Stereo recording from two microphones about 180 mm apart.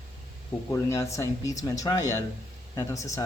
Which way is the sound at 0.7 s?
15° left (ahead or behind).